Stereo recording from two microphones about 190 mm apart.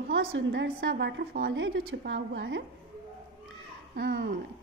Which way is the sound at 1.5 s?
85° right.